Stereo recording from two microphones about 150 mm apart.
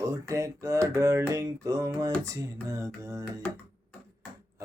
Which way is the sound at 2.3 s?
20° right (ahead or behind).